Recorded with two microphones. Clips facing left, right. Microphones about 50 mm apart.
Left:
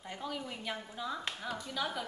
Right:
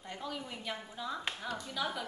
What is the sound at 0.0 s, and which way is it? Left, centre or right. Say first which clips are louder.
A woman's voice: left 1 dB; centre.